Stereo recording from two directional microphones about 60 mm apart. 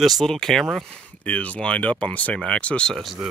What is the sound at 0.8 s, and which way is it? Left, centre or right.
Speech, centre.